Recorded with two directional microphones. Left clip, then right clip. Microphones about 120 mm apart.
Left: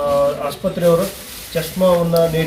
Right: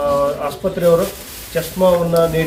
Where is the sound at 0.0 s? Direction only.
5° right (ahead or behind).